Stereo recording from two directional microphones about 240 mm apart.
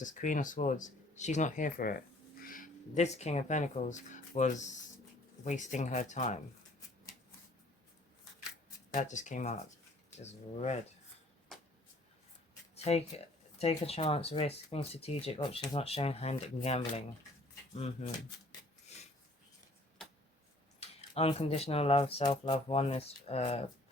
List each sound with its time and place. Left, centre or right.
0.0 s speech: left
8.9 s speech: left
12.7 s speech: left
20.7 s speech: left